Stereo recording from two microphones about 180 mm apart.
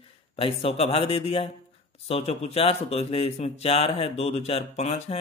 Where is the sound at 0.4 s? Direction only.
30° left (ahead or behind).